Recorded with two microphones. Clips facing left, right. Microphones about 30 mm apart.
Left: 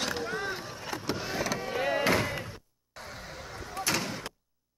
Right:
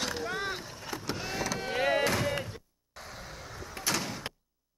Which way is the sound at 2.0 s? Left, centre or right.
Left.